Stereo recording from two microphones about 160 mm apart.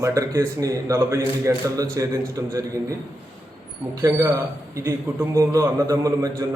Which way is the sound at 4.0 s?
20° right (ahead or behind).